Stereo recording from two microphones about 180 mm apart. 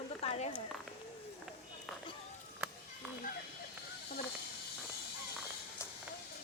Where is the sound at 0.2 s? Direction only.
35° left (ahead or behind).